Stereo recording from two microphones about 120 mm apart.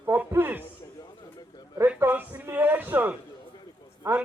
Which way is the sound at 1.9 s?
15° right (ahead or behind).